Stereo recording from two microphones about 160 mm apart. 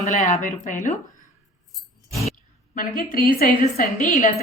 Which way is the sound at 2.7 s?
65° left (ahead or behind).